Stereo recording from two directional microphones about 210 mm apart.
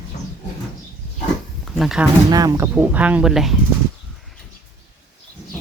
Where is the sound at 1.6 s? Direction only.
Centre (ahead or behind).